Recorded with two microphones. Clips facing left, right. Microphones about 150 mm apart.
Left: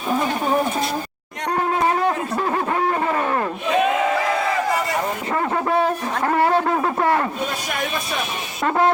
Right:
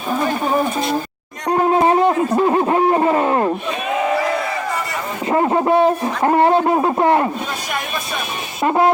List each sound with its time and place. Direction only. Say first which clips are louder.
1.5 s speech: right 6 dB; 25° right (ahead or behind)
5.3 s speech: right 7 dB; 25° right (ahead or behind)
8.6 s a sound: right 3 dB; 15° right (ahead or behind)